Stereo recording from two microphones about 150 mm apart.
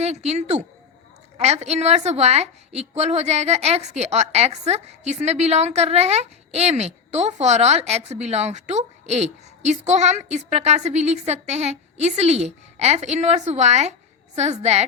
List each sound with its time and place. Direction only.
0.0 s a woman's voice: 45° right (ahead or behind)